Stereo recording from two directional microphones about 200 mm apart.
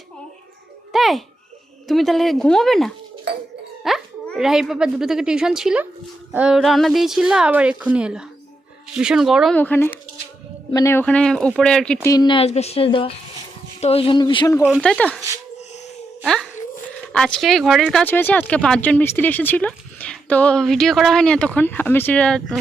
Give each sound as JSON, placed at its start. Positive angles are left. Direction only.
{"t": 0.9, "sound": "babbling", "side_deg": 0}
{"t": 1.9, "sound": "speech", "side_deg": 0}
{"t": 3.3, "sound": "a sound", "side_deg": -60}
{"t": 3.8, "sound": "speech", "side_deg": 0}
{"t": 9.6, "sound": "speech", "side_deg": 10}
{"t": 12.0, "sound": "a woman's voice", "side_deg": 20}
{"t": 14.8, "sound": "speech", "side_deg": 5}
{"t": 16.2, "sound": "a sound", "side_deg": 0}
{"t": 17.1, "sound": "speech", "side_deg": 5}